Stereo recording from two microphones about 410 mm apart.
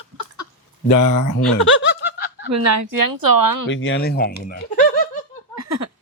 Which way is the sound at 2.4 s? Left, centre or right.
Right.